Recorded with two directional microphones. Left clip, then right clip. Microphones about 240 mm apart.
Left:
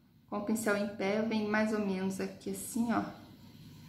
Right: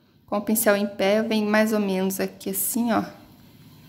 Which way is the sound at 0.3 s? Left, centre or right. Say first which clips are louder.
Right 12 dB; right.